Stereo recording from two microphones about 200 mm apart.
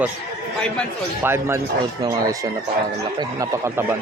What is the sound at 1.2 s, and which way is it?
A man's voice, 10° right (ahead or behind).